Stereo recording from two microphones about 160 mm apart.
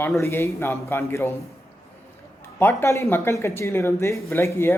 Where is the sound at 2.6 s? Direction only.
15° left (ahead or behind).